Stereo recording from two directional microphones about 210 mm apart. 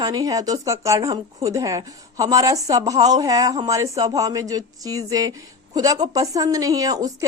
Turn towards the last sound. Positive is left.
turn(degrees=-15)  # may be behind; listen again after turning